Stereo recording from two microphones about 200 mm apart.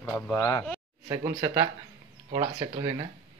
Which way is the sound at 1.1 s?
15° right (ahead or behind).